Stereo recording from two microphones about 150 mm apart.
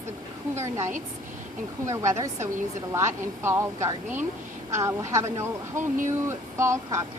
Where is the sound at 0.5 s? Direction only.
20° right (ahead or behind).